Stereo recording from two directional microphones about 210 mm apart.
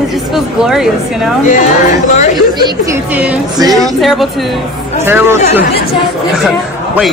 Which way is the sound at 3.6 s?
20° right (ahead or behind).